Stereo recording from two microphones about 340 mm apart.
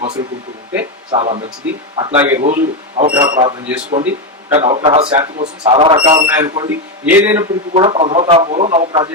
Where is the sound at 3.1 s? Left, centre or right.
Centre.